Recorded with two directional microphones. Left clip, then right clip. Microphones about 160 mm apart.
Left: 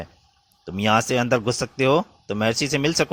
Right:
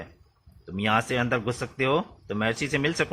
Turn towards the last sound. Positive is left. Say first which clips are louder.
# left 4 dB
turn(degrees=40)  # may be behind; listen again after turning